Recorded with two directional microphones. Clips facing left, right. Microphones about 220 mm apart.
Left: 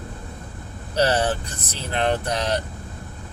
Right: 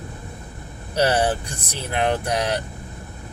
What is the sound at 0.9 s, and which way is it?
Speech, 10° right (ahead or behind).